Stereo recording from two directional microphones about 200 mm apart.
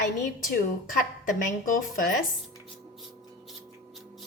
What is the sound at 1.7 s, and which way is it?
Speech, 45° left (ahead or behind).